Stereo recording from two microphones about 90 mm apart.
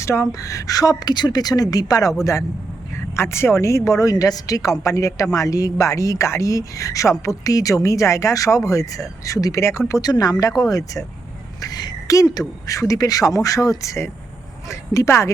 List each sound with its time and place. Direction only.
0.0 s a woman's voice: 30° left (ahead or behind)
3.2 s a woman's voice: 30° left (ahead or behind)
10.0 s a woman's voice: 45° left (ahead or behind)